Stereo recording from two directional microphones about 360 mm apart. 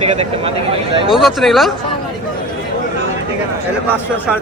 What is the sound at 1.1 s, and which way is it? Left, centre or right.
Speech, centre.